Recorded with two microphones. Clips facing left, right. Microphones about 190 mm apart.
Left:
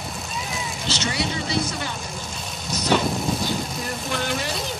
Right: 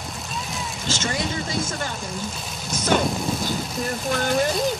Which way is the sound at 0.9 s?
45° right (ahead or behind).